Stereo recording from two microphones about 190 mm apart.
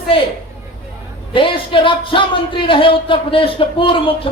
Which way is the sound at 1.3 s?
25° left (ahead or behind).